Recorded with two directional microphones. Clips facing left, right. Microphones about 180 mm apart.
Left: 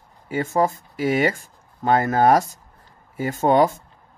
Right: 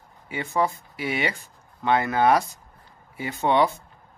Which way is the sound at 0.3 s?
45° left (ahead or behind).